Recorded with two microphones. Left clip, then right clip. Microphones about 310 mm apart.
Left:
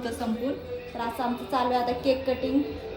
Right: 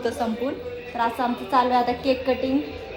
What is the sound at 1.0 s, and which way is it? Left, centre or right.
A woman's voice, right.